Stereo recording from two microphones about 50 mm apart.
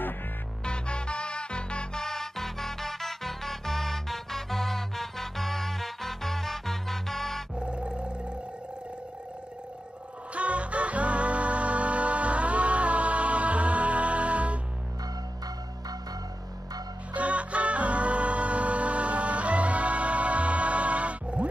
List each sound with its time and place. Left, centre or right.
0.7 s music: centre
2.0 s music: centre
7.5 s roar: right
10.3 s music: right
17.1 s music: right